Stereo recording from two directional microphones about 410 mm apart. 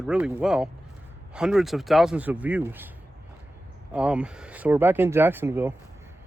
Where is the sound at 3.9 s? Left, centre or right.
Centre.